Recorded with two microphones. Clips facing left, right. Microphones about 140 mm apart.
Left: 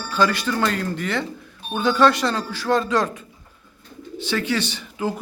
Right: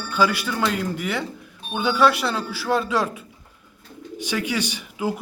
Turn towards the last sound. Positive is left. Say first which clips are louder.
# even
turn(degrees=-10)  # may be behind; listen again after turning